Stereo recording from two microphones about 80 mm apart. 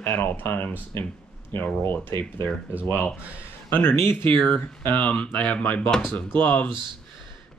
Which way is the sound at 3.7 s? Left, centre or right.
Left.